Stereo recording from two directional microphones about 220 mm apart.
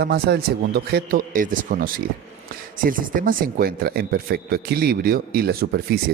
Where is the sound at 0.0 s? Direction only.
45° right (ahead or behind).